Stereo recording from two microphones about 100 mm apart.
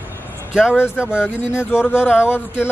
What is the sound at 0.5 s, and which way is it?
Speech, 10° right (ahead or behind).